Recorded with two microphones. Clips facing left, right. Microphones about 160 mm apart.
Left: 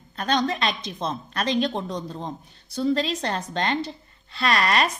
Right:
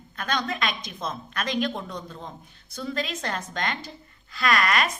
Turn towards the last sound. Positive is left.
turn(degrees=30)  # may be behind; listen again after turning